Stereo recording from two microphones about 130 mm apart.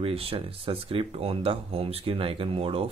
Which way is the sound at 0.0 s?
45° right (ahead or behind).